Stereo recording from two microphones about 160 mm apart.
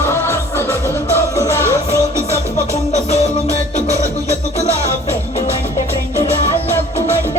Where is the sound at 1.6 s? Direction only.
15° right (ahead or behind).